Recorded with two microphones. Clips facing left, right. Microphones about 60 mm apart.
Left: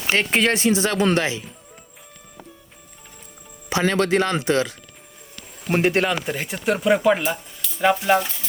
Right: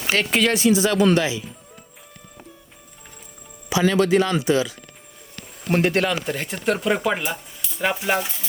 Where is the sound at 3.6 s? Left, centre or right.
Left.